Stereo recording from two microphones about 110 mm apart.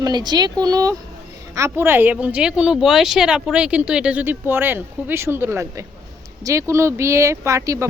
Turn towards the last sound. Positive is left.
turn(degrees=-30)  # may be behind; listen again after turning